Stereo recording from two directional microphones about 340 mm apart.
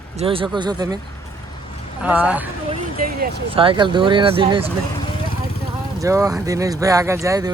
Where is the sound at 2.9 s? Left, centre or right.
Right.